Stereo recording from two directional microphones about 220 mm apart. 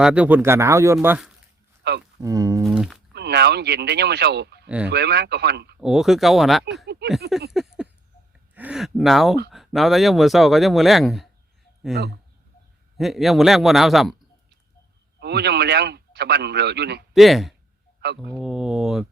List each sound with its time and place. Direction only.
0.0 s speech: 5° right (ahead or behind)
1.8 s a sound: 50° right (ahead or behind)
2.2 s speech: 15° right (ahead or behind)
2.6 s speech: centre (ahead or behind)
3.2 s a man's voice: 50° right (ahead or behind)
5.8 s speech: centre (ahead or behind)
7.5 s a sound: centre (ahead or behind)
8.5 s speech: 5° right (ahead or behind)
15.2 s a man's voice: 50° right (ahead or behind)
17.2 s speech: centre (ahead or behind)